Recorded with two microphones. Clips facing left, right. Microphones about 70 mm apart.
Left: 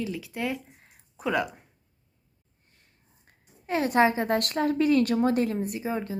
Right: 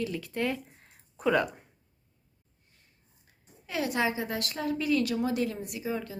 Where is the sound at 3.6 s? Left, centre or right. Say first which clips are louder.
Left 7 dB; left.